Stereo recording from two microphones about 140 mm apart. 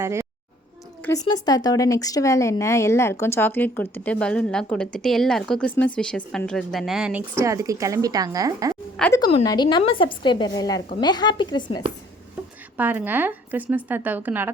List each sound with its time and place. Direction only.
0.0 s speech: 20° right (ahead or behind)
1.3 s speech: 30° left (ahead or behind); by 8.7 s 25° right (ahead or behind)
9.0 s speech: centre (ahead or behind)
9.4 s a woman's voice: 30° left (ahead or behind)
12.7 s speech: 15° right (ahead or behind)